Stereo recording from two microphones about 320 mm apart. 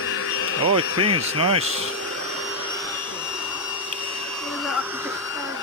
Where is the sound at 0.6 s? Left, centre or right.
Right.